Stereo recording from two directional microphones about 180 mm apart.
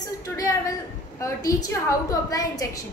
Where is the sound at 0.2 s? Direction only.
20° left (ahead or behind).